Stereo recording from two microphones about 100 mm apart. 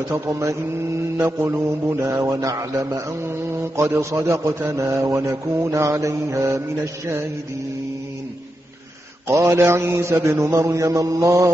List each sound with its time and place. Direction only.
0.1 s speech: 30° right (ahead or behind)
1.4 s mantra: 25° right (ahead or behind)
9.3 s mantra: 25° right (ahead or behind)